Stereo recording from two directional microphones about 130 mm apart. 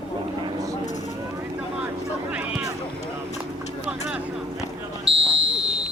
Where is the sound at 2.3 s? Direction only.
10° right (ahead or behind).